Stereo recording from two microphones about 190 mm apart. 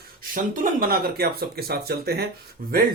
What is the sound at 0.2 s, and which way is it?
Speech, 45° right (ahead or behind).